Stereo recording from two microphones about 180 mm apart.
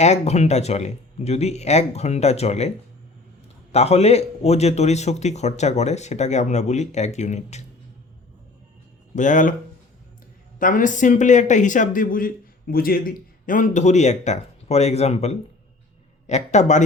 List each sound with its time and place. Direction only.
0.0 s a man's voice: 35° left (ahead or behind)
9.1 s speech: 45° left (ahead or behind)
10.6 s a man's voice: 45° left (ahead or behind)